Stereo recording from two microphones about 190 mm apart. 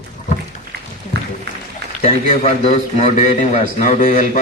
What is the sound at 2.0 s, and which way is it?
A man's voice, 35° left (ahead or behind).